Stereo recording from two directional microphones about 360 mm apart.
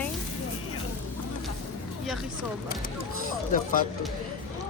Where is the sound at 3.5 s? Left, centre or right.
Left.